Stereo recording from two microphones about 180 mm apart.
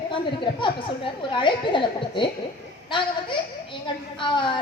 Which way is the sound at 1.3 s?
25° left (ahead or behind).